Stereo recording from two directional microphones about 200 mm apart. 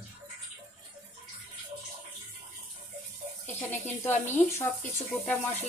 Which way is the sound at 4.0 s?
10° left (ahead or behind).